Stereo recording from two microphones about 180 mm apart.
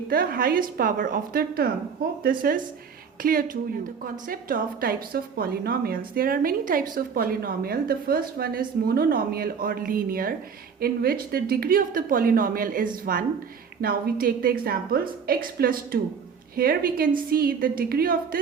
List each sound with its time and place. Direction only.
0.1 s a woman's voice: 55° right (ahead or behind)